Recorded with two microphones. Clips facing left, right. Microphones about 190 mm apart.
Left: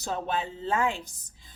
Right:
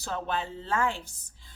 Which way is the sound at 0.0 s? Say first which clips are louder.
Left 2 dB; 20° left (ahead or behind).